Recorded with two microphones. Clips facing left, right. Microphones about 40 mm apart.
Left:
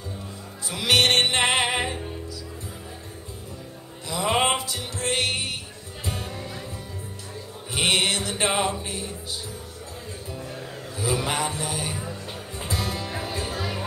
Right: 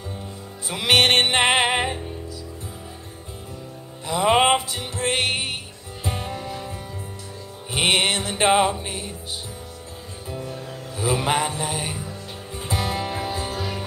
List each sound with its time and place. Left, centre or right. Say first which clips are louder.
0.7 s music: right 2 dB; right
4.1 s music: right 5 dB; right
7.7 s music: right 2 dB; right
11.0 s mantra: right 4 dB; right
12.6 s music: right 4 dB; right